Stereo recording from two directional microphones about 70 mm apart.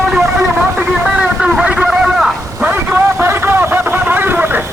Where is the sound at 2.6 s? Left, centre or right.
Right.